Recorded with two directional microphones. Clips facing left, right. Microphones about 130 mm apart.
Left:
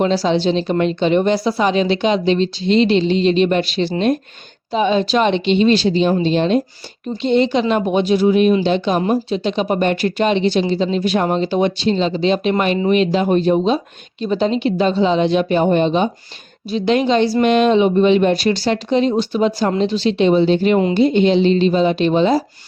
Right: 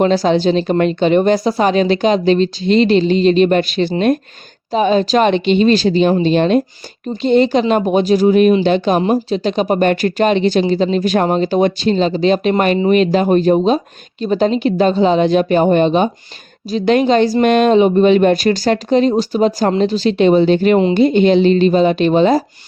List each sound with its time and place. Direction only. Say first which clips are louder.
0.0 s a woman's voice: right 3 dB; 50° right (ahead or behind)
7.2 s a woman's voice: right 3 dB; 45° right (ahead or behind)